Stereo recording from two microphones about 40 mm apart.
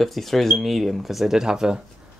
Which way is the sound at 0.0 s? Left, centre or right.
Centre.